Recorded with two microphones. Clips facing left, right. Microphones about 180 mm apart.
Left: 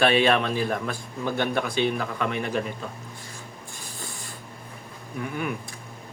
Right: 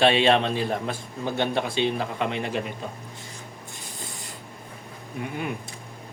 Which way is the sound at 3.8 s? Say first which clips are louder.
Left 1 dB; 20° right (ahead or behind).